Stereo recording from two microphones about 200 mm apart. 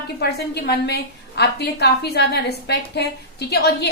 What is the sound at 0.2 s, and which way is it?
A woman's voice, 55° left (ahead or behind).